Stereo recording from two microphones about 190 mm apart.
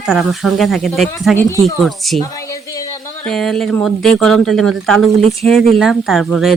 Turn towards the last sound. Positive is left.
turn(degrees=0)  # may be behind; listen again after turning